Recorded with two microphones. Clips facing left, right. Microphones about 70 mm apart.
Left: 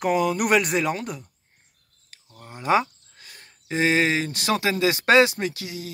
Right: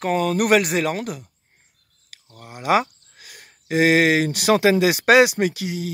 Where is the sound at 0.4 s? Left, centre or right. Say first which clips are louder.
Right 3 dB; centre.